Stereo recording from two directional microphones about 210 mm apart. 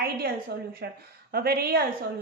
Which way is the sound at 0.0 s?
45° right (ahead or behind).